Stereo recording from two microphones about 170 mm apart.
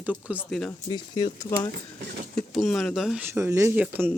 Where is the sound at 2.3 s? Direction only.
Centre (ahead or behind).